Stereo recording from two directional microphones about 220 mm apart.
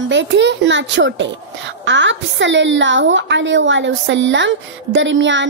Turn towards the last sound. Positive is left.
turn(degrees=-55)  # may be behind; listen again after turning